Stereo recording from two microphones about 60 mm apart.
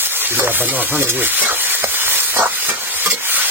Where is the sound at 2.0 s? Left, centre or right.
Right.